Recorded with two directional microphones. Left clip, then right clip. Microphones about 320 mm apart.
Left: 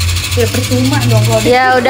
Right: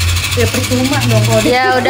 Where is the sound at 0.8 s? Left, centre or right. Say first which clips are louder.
Even; centre.